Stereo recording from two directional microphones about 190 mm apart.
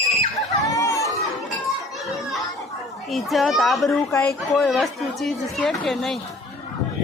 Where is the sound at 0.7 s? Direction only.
15° left (ahead or behind).